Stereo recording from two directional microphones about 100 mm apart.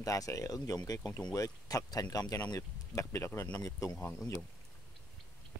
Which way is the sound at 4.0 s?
20° left (ahead or behind).